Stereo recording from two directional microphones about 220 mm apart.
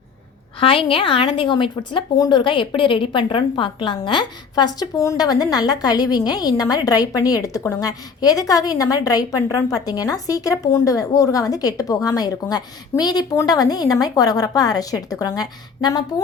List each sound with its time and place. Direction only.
0.6 s a woman's voice: 25° left (ahead or behind)